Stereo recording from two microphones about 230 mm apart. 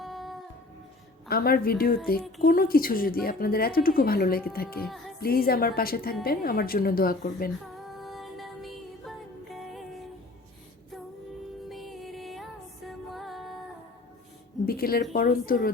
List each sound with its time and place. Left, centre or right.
0.0 s music: centre
1.3 s a woman's voice: left
7.9 s music: centre
11.7 s music: centre
14.7 s a sound: left
15.1 s a woman's voice: left